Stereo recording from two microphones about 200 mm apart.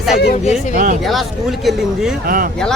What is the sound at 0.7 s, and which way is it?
Speech, 40° right (ahead or behind).